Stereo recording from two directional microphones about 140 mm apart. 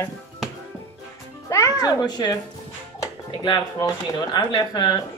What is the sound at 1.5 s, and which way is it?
Speech, 25° left (ahead or behind).